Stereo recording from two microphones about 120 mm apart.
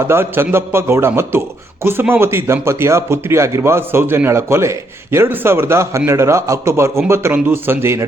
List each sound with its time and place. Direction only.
0.0 s speech: 20° right (ahead or behind)